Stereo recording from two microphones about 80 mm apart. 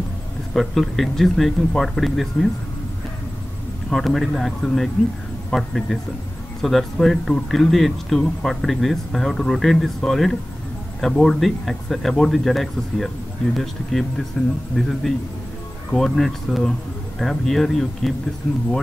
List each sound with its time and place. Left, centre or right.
0.5 s speech: centre
3.9 s speech: centre
14.3 s speech: centre